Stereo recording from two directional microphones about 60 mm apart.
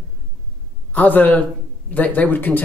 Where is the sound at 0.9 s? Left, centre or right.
Left.